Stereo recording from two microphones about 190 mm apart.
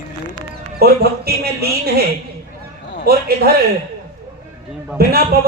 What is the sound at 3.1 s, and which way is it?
Speech, 55° right (ahead or behind).